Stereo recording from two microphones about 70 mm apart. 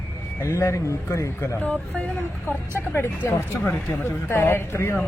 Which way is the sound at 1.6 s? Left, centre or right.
Centre.